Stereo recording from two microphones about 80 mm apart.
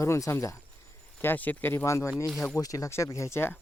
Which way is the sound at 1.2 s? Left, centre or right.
Left.